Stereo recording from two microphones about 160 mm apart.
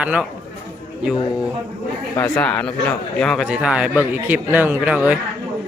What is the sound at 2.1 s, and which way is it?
Speech, 15° left (ahead or behind).